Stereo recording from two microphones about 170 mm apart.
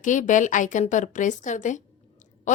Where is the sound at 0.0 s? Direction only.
50° left (ahead or behind).